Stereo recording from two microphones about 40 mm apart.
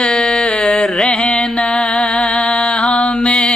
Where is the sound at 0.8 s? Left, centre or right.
Centre.